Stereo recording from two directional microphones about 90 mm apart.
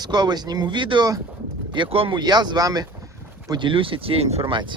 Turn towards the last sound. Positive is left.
turn(degrees=-75)  # may be behind; listen again after turning